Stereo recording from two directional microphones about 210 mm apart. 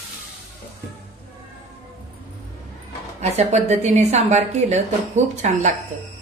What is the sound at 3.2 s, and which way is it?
A woman's voice, 30° right (ahead or behind).